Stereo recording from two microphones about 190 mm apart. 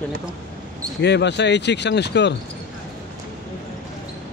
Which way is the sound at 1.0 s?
65° left (ahead or behind).